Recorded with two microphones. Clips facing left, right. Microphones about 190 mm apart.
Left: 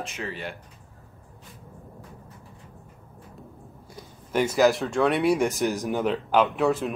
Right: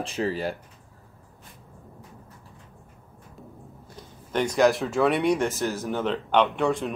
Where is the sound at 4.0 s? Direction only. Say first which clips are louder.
Left 2 dB; 5° left (ahead or behind).